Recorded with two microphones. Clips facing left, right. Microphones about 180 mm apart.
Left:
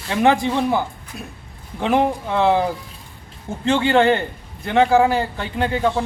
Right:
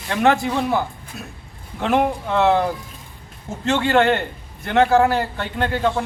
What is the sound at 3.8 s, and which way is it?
Speech, 15° left (ahead or behind).